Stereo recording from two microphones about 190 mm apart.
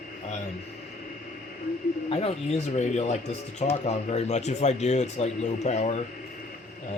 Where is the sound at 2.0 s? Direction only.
35° left (ahead or behind).